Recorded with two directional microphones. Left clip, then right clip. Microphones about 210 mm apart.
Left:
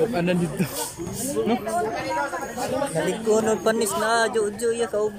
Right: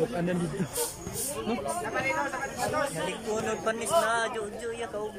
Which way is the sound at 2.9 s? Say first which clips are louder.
Left 10 dB; 35° left (ahead or behind).